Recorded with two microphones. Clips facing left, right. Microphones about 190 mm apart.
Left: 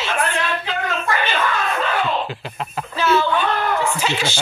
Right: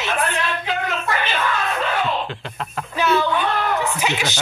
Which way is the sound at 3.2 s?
15° right (ahead or behind).